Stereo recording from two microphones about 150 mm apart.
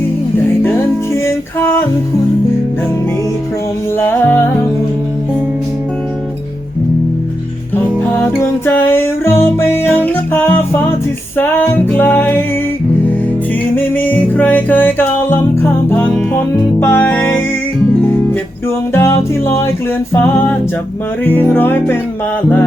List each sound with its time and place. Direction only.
1.1 s music: 15° left (ahead or behind)
3.9 s music: 15° left (ahead or behind)
7.8 s music: 15° left (ahead or behind)
13.7 s music: 10° left (ahead or behind)
18.9 s music: 15° left (ahead or behind)